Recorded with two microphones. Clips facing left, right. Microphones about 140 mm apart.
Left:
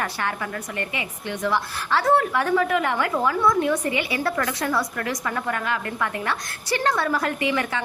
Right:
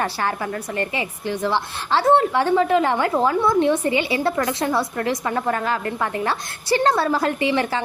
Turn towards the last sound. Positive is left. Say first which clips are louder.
# right 3 dB
turn(degrees=-30)  # may be behind; listen again after turning